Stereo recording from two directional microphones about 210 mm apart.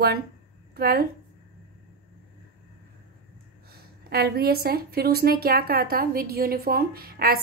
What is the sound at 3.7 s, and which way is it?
A woman's voice, 45° right (ahead or behind).